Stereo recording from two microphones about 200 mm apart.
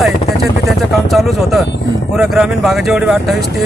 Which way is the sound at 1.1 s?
Centre (ahead or behind).